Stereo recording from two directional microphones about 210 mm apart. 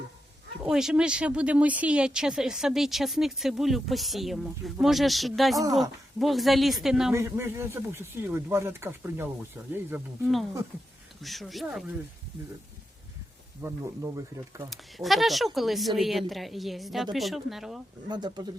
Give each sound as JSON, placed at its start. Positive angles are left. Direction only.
{"t": 0.6, "sound": "speech", "side_deg": -5}
{"t": 7.1, "sound": "speech", "side_deg": -10}
{"t": 9.9, "sound": "speech", "side_deg": 0}
{"t": 13.6, "sound": "speech", "side_deg": -15}
{"t": 14.7, "sound": "speech", "side_deg": 0}
{"t": 18.1, "sound": "speech", "side_deg": -20}